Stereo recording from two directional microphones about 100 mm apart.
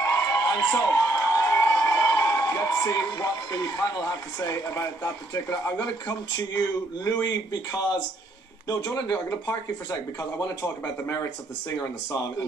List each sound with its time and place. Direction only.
0.0 s a man's voice: 35° left (ahead or behind)
8.6 s speech: 40° left (ahead or behind)
9.3 s speech: 25° left (ahead or behind)
11.8 s speech: 35° left (ahead or behind)